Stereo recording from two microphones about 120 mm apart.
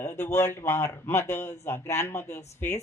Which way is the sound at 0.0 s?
20° left (ahead or behind).